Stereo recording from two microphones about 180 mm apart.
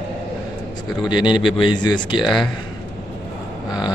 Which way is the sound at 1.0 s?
25° left (ahead or behind).